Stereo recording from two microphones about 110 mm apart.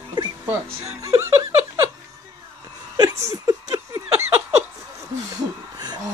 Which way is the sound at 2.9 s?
30° right (ahead or behind).